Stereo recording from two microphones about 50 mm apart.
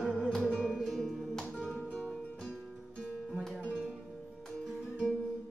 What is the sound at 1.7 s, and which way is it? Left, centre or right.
Music, centre.